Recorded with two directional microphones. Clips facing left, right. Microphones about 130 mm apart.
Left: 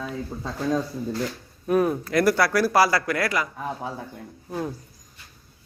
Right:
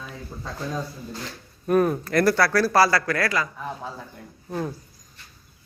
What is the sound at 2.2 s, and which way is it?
Speech, 15° left (ahead or behind).